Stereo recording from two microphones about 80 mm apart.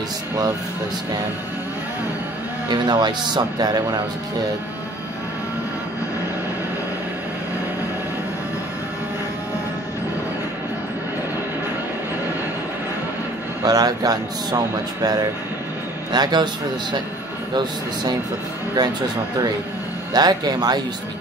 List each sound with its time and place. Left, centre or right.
2.7 s speech: right
13.7 s speech: right
16.1 s speech: right
20.1 s speech: right